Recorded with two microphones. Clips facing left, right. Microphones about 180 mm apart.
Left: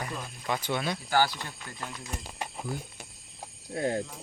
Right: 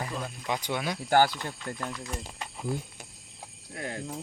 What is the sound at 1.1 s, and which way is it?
Speech, 50° right (ahead or behind).